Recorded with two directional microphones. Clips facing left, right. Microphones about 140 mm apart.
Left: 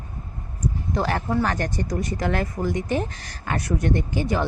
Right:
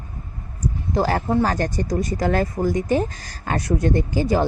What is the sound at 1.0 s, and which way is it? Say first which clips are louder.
Speech: right 4 dB; 25° right (ahead or behind).